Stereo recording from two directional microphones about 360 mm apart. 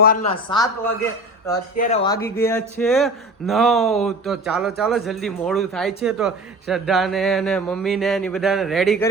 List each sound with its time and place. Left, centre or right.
0.0 s speech: left
1.7 s speech: centre